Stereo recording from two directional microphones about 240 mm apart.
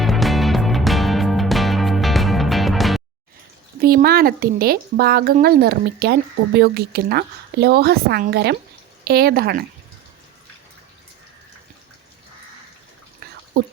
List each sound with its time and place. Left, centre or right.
0.0 s music: centre
3.8 s speech: right